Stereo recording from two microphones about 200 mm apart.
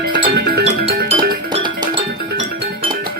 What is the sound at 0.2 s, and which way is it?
Music, 50° right (ahead or behind).